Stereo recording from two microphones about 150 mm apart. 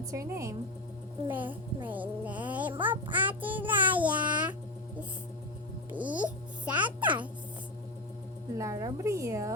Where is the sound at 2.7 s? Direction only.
35° right (ahead or behind).